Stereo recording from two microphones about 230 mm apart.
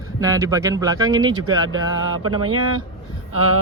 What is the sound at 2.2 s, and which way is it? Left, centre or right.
Speech, right.